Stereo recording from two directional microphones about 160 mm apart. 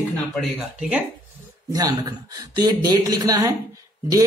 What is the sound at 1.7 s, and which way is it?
A man's voice, 25° right (ahead or behind).